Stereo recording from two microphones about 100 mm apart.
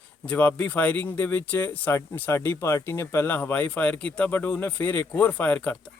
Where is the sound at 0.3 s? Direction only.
15° left (ahead or behind).